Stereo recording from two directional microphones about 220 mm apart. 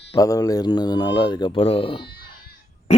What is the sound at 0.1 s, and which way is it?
Speech, 15° left (ahead or behind).